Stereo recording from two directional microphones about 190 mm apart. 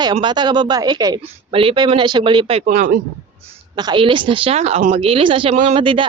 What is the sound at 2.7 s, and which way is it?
Speech, 45° right (ahead or behind).